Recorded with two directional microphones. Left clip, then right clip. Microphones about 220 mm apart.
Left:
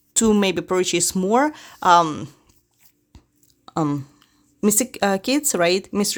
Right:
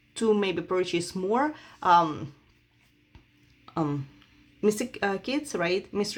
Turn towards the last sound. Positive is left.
turn(degrees=55)  # may be behind; listen again after turning